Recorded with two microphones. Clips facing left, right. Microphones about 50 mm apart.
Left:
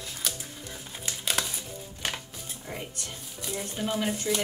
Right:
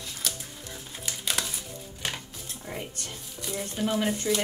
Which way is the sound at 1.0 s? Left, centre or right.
Centre.